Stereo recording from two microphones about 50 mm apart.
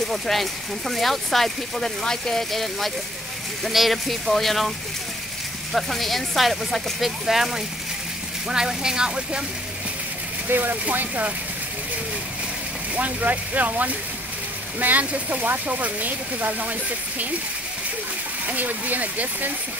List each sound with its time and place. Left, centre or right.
0.1 s speech: centre
10.5 s speech: right
12.9 s speech: right
18.5 s speech: right